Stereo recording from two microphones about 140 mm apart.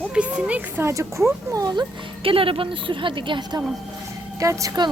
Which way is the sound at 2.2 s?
40° right (ahead or behind).